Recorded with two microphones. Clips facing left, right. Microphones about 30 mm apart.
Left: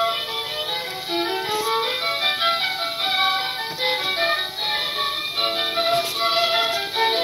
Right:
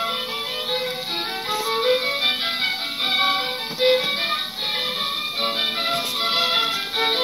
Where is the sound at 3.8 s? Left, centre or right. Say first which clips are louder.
Right 3 dB; centre.